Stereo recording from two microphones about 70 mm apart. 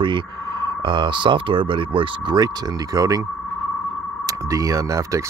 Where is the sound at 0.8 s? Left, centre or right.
Right.